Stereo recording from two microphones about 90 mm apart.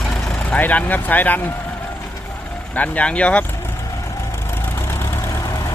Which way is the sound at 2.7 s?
15° left (ahead or behind).